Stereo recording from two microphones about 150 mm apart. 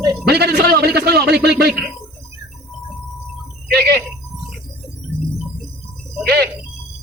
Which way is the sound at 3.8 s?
90° right.